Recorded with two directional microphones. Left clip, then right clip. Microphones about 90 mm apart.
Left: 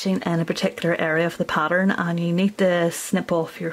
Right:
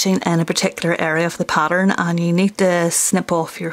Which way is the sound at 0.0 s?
30° right (ahead or behind).